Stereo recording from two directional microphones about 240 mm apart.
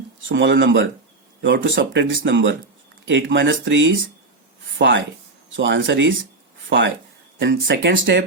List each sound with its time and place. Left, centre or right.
0.3 s speech: right